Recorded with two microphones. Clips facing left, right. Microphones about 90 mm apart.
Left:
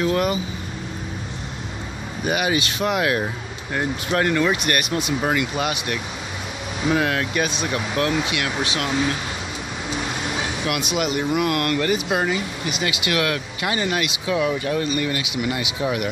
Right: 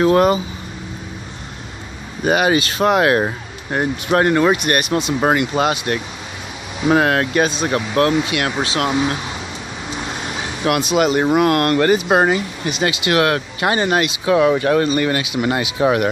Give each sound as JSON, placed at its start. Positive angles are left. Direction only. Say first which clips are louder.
{"t": 0.0, "sound": "speech", "louder": "right 7 dB", "side_deg": -45}
{"t": 2.2, "sound": "speech", "louder": "right 6 dB", "side_deg": -45}
{"t": 3.7, "sound": "speech", "louder": "right 5 dB", "side_deg": -40}
{"t": 5.2, "sound": "speech", "louder": "right 8 dB", "side_deg": -45}
{"t": 10.6, "sound": "speech", "louder": "right 10 dB", "side_deg": -35}
{"t": 12.9, "sound": "speech", "louder": "right 7 dB", "side_deg": -30}
{"t": 14.2, "sound": "speech", "louder": "right 8 dB", "side_deg": -55}
{"t": 15.2, "sound": "speech", "louder": "right 6 dB", "side_deg": -40}